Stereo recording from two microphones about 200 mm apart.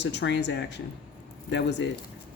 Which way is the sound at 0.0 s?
60° left (ahead or behind).